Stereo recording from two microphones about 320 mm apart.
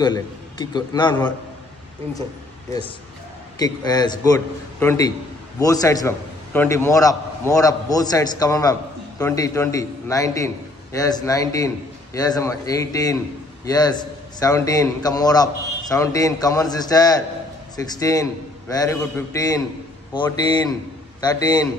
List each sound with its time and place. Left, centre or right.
0.0 s a man's voice: centre
3.5 s a man's voice: centre